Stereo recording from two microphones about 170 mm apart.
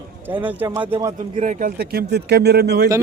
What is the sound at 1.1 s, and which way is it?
Speech, 45° right (ahead or behind).